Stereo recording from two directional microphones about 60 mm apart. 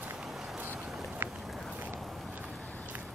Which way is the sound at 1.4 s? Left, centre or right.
Centre.